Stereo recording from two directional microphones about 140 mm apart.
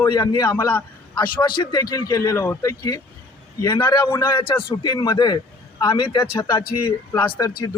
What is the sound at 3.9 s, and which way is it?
Speech, 30° left (ahead or behind).